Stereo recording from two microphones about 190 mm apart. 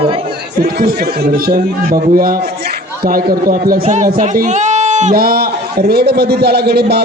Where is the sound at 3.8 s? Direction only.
40° right (ahead or behind).